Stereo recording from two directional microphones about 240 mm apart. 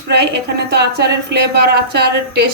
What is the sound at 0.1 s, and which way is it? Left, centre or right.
A woman's voice, right.